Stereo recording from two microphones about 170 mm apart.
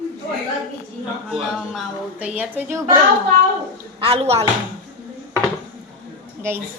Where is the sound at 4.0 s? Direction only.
35° right (ahead or behind).